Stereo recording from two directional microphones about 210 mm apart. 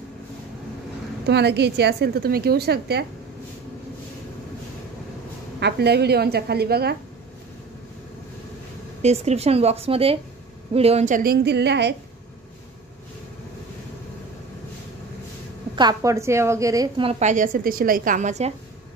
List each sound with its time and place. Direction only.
1.2 s a woman's voice: 50° right (ahead or behind)
5.6 s a woman's voice: 50° right (ahead or behind)
9.0 s a woman's voice: 30° right (ahead or behind); by 11.9 s 55° right (ahead or behind)
15.7 s a woman's voice: 20° right (ahead or behind)